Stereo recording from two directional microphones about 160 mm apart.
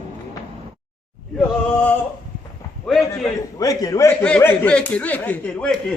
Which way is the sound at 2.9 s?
Centre (ahead or behind).